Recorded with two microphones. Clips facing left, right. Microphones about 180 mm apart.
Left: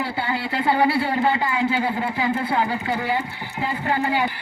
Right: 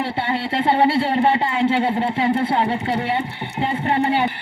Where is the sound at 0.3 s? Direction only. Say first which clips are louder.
Right 3 dB; 25° right (ahead or behind).